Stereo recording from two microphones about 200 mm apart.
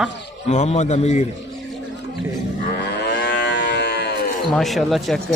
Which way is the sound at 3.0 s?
55° left (ahead or behind).